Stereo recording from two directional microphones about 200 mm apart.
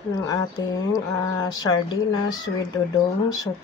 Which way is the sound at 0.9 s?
20° left (ahead or behind).